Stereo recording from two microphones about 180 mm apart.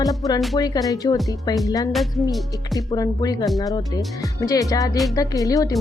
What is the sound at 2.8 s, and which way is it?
Speech, 20° left (ahead or behind).